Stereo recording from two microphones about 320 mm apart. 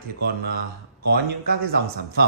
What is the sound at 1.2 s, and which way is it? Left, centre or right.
Speech, right.